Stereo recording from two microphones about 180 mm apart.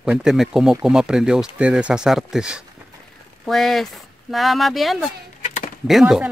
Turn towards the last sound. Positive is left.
turn(degrees=0)  # may be behind; listen again after turning